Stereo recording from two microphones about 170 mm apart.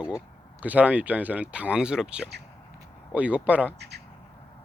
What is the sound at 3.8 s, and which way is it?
Speech, 80° right.